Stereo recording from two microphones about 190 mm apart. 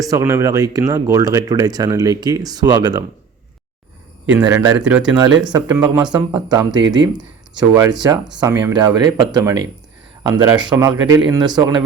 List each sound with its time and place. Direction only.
0.0 s speech: 15° right (ahead or behind)
4.3 s speech: 10° right (ahead or behind)
5.5 s speech: 20° right (ahead or behind)